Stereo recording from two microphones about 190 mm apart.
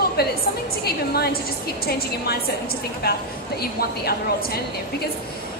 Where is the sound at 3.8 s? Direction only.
55° left (ahead or behind).